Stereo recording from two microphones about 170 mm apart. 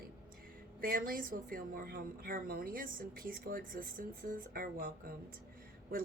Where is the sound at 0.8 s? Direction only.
60° right (ahead or behind).